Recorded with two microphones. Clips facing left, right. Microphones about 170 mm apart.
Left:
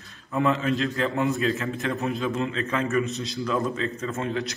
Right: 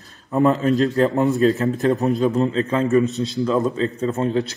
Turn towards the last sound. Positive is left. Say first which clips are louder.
# right 8 dB
turn(degrees=-35)  # may be behind; listen again after turning